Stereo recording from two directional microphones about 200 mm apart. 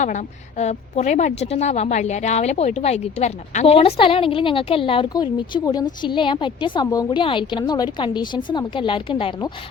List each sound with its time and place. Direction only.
0.0 s a woman's voice: 35° left (ahead or behind)